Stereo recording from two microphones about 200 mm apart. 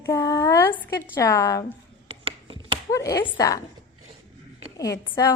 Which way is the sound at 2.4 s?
25° right (ahead or behind).